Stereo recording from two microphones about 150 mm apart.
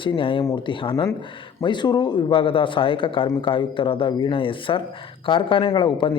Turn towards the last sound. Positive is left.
turn(degrees=35)  # may be behind; listen again after turning